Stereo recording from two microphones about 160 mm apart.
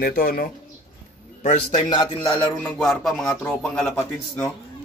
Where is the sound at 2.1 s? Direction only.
10° left (ahead or behind).